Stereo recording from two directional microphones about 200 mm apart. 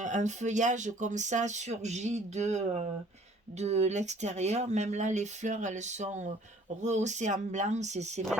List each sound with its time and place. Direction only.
0.0 s speech: 35° right (ahead or behind)